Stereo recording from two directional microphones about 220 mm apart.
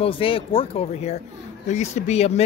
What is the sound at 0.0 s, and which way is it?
Speech, 25° left (ahead or behind).